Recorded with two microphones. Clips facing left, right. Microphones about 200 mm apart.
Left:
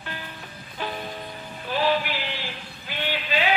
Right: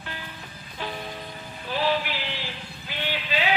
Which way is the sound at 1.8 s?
50° left (ahead or behind).